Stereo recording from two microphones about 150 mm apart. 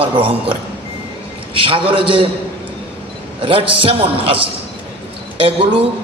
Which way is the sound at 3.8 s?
35° right (ahead or behind).